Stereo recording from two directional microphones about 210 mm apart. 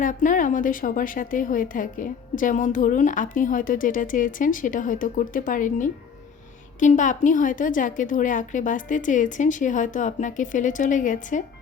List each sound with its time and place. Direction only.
0.0 s a woman's voice: 40° left (ahead or behind)